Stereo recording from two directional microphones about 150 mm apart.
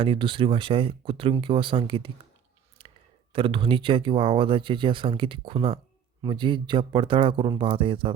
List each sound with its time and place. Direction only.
0.0 s speech: 35° right (ahead or behind)
2.8 s clicking: 35° right (ahead or behind)
3.3 s speech: 35° right (ahead or behind)